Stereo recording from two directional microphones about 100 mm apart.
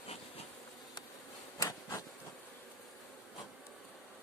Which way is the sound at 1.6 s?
35° left (ahead or behind).